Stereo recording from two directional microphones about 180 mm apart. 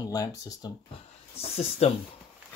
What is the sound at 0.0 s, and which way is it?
Speech, 20° left (ahead or behind).